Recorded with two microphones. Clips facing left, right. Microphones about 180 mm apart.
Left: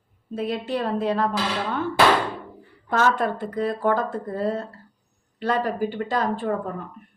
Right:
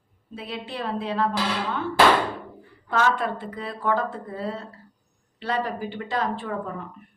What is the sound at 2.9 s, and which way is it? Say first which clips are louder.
Speech: left 2 dB; 45° left (ahead or behind).